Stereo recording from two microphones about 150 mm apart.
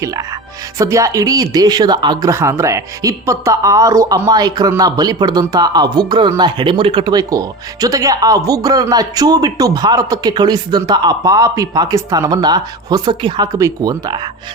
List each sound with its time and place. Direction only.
0.8 s speech: 20° right (ahead or behind)